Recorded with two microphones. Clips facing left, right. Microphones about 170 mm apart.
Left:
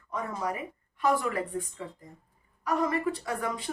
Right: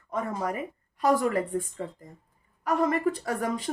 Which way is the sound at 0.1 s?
45° right (ahead or behind).